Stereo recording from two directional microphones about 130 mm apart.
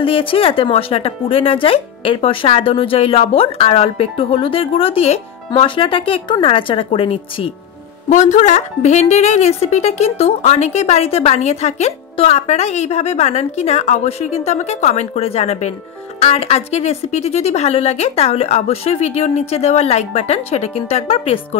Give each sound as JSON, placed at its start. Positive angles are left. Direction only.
{"t": 0.0, "sound": "speech", "side_deg": 45}
{"t": 8.1, "sound": "a woman's voice", "side_deg": 65}